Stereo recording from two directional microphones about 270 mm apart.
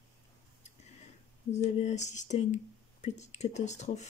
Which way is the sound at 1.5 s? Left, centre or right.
Left.